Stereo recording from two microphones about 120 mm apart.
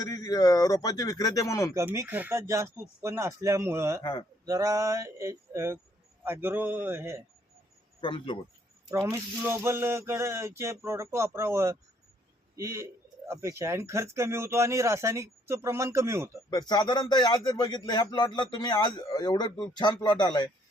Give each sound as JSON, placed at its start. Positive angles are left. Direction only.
{"t": 0.0, "sound": "speech", "side_deg": 30}
{"t": 1.7, "sound": "a man's voice", "side_deg": -20}
{"t": 4.0, "sound": "speech", "side_deg": 35}
{"t": 4.4, "sound": "a man's voice", "side_deg": -30}
{"t": 8.0, "sound": "speech", "side_deg": 50}
{"t": 8.9, "sound": "speech", "side_deg": -25}
{"t": 16.5, "sound": "speech", "side_deg": 35}